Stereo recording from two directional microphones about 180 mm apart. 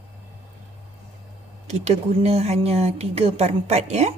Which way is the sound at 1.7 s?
40° right (ahead or behind).